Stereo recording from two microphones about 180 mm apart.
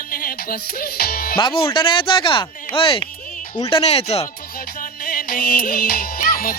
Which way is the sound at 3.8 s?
35° left (ahead or behind).